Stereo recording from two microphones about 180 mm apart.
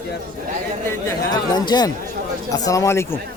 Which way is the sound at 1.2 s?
25° left (ahead or behind).